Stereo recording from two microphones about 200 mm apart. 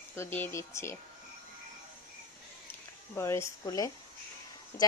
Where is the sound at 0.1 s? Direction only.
10° left (ahead or behind).